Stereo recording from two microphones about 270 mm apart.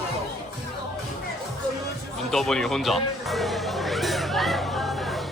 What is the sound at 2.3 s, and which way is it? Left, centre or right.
Music, centre.